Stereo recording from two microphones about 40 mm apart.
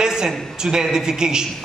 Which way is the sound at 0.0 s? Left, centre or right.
Centre.